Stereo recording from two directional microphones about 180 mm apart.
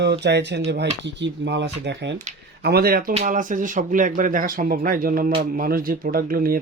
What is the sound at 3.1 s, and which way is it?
Speech, 40° right (ahead or behind).